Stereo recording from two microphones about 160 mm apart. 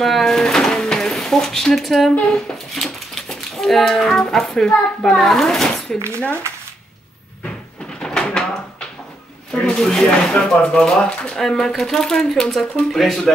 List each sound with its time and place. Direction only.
0.0 s speech: centre (ahead or behind)
5.9 s speech: 15° right (ahead or behind)
8.0 s a sound: 5° left (ahead or behind)
9.5 s speech: 5° left (ahead or behind)